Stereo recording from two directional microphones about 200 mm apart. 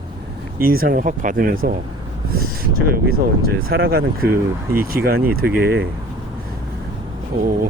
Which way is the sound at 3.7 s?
50° right (ahead or behind).